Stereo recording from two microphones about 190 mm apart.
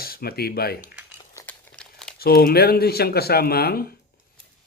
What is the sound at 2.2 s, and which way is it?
Speech, 55° left (ahead or behind).